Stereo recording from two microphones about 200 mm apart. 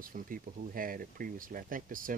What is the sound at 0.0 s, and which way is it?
Speech, 45° right (ahead or behind).